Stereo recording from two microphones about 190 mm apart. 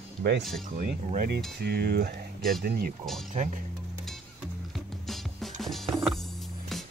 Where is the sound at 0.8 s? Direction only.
50° right (ahead or behind).